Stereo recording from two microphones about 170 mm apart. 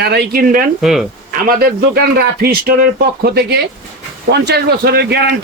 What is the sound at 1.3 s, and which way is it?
A man's voice, 60° right (ahead or behind).